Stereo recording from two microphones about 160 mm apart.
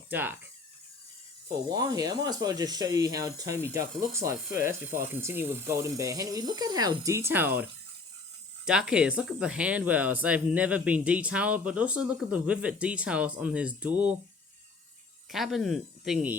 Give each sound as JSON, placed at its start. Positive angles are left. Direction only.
{"t": 0.1, "sound": "speech", "side_deg": -10}
{"t": 1.7, "sound": "speech", "side_deg": -25}
{"t": 15.3, "sound": "speech", "side_deg": 0}